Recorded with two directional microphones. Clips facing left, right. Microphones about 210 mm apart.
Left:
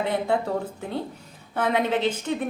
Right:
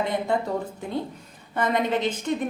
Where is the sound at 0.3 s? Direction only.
5° left (ahead or behind).